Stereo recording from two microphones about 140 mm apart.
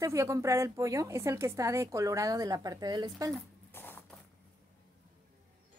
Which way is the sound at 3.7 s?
15° left (ahead or behind).